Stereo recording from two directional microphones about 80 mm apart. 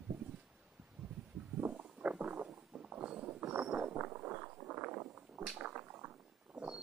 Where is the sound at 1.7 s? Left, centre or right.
Centre.